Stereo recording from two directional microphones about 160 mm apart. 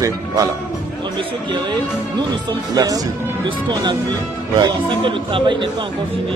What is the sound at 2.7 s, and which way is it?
A man's voice, 25° right (ahead or behind).